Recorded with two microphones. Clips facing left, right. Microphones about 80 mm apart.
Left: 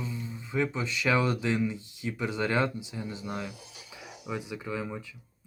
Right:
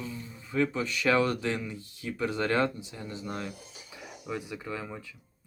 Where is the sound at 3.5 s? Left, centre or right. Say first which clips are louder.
Right 1 dB; right.